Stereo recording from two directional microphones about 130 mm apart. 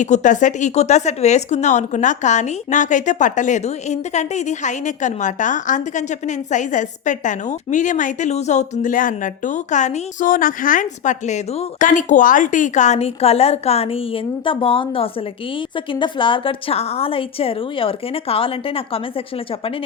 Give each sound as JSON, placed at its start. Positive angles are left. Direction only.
{"t": 0.0, "sound": "a woman's voice", "side_deg": 70}